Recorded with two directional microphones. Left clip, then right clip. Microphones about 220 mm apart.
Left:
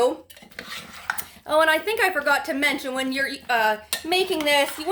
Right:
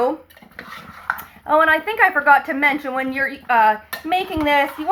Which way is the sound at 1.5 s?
70° left (ahead or behind).